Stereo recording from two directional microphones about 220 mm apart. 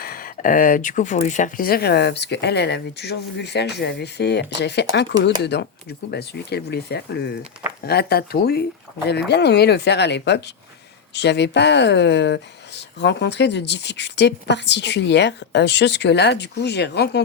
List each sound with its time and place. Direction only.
0.0 s speech: 40° left (ahead or behind)